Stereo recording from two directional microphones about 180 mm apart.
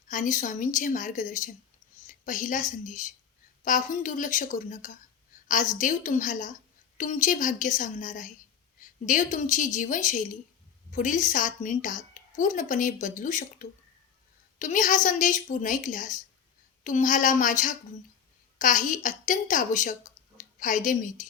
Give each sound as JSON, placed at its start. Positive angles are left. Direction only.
{"t": 0.1, "sound": "a woman's voice", "side_deg": 45}